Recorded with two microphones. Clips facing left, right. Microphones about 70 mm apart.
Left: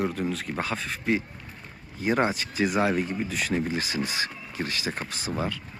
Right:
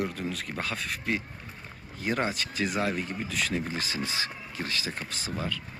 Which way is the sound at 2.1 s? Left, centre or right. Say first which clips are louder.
Left 5 dB; left.